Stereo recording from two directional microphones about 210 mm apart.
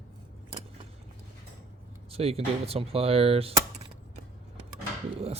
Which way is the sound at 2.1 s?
30° right (ahead or behind).